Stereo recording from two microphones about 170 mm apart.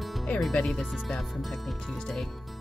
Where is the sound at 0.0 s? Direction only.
Centre (ahead or behind).